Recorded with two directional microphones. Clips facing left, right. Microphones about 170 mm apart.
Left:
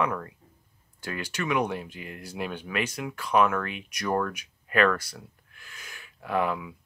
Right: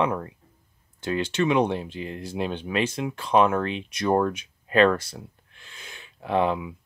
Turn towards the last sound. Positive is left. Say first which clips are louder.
# right 4 dB
turn(degrees=-25)  # may be behind; listen again after turning